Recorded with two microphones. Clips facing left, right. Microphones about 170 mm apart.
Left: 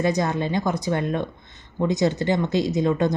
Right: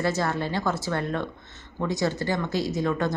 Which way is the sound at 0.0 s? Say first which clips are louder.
Left 3 dB; 20° left (ahead or behind).